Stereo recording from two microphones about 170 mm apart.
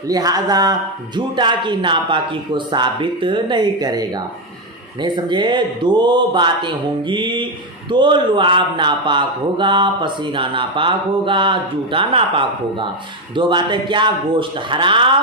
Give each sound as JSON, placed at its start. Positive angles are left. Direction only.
{"t": 0.1, "sound": "speech", "side_deg": -20}